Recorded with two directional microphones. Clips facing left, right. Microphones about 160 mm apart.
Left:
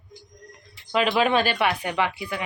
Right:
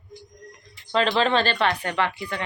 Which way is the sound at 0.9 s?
10° left (ahead or behind).